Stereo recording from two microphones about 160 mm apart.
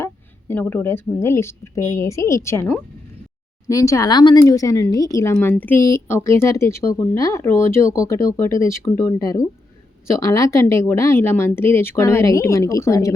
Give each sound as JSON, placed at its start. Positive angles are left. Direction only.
{"t": 0.0, "sound": "speech", "side_deg": 15}